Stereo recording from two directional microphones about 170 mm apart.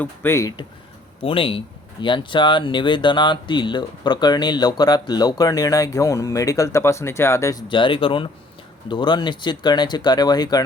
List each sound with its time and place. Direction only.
0.0 s speech: 15° left (ahead or behind)
1.2 s speech: 30° left (ahead or behind); by 7.6 s 15° left (ahead or behind)
7.7 s speech: 30° left (ahead or behind)